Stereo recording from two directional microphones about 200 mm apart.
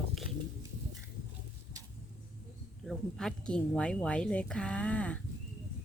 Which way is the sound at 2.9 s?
Centre (ahead or behind).